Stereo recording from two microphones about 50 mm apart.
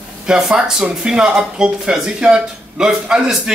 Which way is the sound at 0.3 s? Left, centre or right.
Centre.